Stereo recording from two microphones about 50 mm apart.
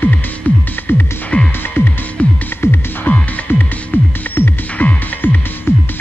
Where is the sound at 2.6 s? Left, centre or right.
Left.